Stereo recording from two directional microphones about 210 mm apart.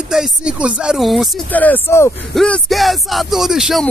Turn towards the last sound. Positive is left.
turn(degrees=0)  # may be behind; listen again after turning